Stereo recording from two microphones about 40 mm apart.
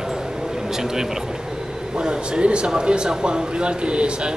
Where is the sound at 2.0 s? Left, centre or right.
Right.